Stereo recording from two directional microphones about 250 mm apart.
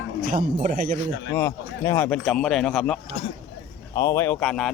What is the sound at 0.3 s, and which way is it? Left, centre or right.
Speech, right.